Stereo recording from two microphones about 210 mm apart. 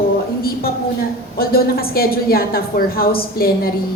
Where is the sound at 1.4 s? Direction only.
45° left (ahead or behind).